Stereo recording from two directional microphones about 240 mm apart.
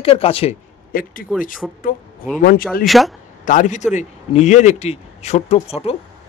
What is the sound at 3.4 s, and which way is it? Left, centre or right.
A man's voice, left.